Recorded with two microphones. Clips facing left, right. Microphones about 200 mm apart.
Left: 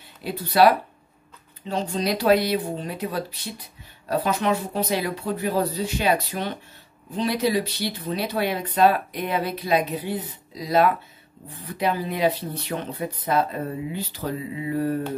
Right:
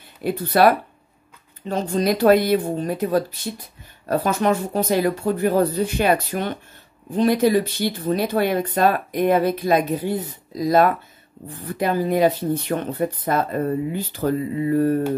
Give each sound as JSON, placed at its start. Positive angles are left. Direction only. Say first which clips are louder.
{"t": 0.2, "sound": "speech", "louder": "right 2 dB", "side_deg": -50}